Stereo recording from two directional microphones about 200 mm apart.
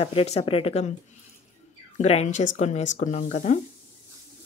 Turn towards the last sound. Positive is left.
turn(degrees=35)  # may be behind; listen again after turning